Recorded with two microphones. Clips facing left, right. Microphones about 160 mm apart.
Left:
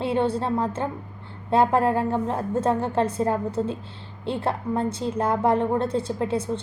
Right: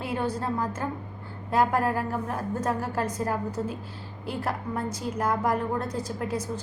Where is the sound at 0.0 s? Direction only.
25° left (ahead or behind).